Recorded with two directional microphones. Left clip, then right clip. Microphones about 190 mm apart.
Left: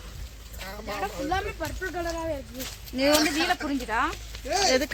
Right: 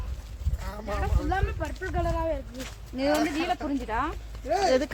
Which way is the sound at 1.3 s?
45° left (ahead or behind).